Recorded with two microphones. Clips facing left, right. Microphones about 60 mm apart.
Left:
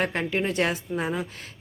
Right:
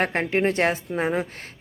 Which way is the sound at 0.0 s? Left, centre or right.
Right.